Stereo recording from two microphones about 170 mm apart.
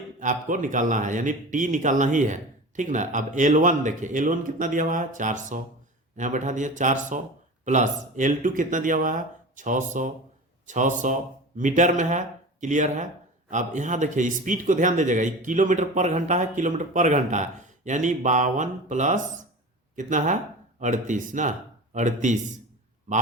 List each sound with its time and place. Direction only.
0.2 s a man's voice: 50° right (ahead or behind)